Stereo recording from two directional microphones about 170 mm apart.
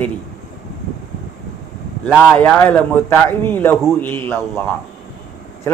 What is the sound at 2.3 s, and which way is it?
A man's voice, 10° left (ahead or behind).